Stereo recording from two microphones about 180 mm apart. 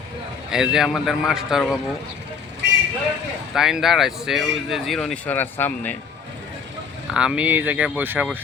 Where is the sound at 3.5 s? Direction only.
5° right (ahead or behind).